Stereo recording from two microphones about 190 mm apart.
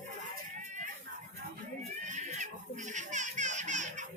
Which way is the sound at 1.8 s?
40° right (ahead or behind).